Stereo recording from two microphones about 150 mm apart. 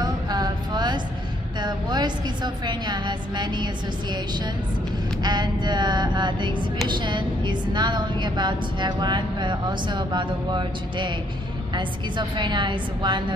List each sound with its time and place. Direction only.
0.0 s music: 25° right (ahead or behind)
1.6 s a woman's voice: 30° right (ahead or behind)